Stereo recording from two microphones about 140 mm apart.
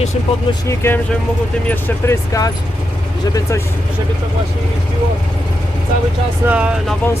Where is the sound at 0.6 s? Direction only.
20° left (ahead or behind).